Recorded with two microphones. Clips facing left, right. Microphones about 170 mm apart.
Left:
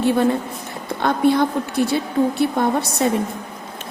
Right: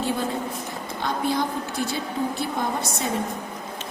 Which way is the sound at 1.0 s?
60° left (ahead or behind).